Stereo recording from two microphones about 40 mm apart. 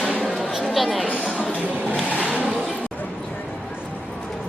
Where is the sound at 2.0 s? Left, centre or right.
Right.